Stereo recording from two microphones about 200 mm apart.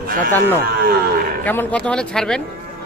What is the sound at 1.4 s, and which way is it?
Speech, 10° left (ahead or behind).